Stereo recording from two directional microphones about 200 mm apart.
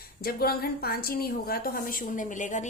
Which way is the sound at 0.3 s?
50° left (ahead or behind).